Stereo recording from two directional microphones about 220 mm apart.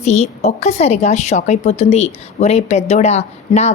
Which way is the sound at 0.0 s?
30° left (ahead or behind).